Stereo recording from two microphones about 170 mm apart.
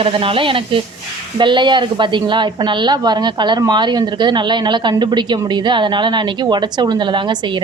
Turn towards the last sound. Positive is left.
turn(degrees=-25)  # may be behind; listen again after turning